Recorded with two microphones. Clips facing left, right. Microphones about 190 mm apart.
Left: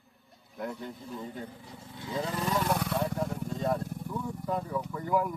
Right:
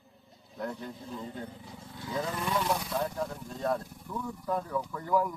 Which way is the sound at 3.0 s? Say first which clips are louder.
Left 2 dB; 10° left (ahead or behind).